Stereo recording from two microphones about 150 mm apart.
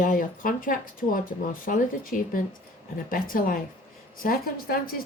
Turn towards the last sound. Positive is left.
turn(degrees=80)